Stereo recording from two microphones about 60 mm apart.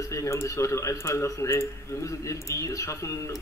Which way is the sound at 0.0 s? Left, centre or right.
Left.